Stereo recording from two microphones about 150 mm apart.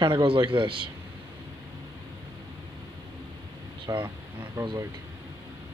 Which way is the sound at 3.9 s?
20° right (ahead or behind).